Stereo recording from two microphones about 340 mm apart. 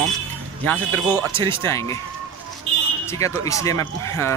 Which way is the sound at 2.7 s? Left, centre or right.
Right.